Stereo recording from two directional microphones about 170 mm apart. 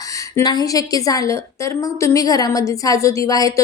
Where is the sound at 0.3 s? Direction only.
20° left (ahead or behind).